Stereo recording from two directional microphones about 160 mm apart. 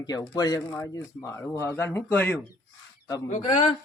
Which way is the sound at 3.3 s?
45° left (ahead or behind).